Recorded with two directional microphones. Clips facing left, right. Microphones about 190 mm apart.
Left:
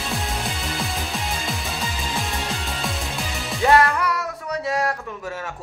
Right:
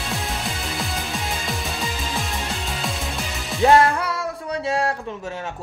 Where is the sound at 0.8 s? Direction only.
Centre (ahead or behind).